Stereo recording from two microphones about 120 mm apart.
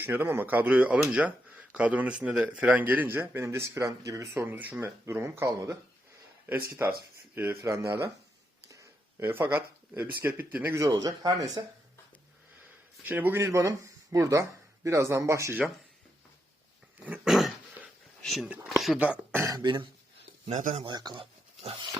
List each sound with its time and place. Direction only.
0.0 s speech: 15° right (ahead or behind)
10.8 s speech: 30° right (ahead or behind)
13.1 s speech: 15° right (ahead or behind)
17.0 s dog: 15° right (ahead or behind)
18.2 s a sound: centre (ahead or behind)
18.4 s speech: 10° right (ahead or behind)
19.5 s speech: 40° right (ahead or behind)
20.5 s speech: 85° right
20.8 s speech: 35° right (ahead or behind)
21.6 s a sound: 55° right (ahead or behind)